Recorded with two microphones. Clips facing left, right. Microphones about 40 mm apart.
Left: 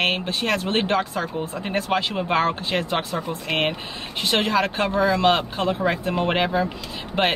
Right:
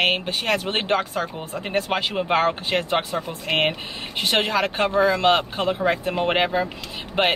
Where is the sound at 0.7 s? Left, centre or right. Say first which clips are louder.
Left 1 dB; right.